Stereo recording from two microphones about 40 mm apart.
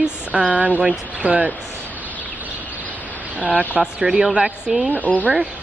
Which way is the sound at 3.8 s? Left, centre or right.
Centre.